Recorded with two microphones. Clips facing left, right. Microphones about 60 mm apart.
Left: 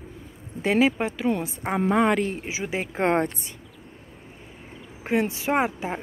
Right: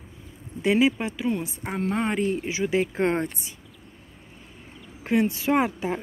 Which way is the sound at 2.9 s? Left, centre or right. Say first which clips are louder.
Left 2 dB; left.